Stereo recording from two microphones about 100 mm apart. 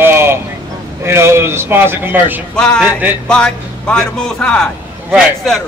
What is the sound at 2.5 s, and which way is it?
A man's voice, 10° left (ahead or behind).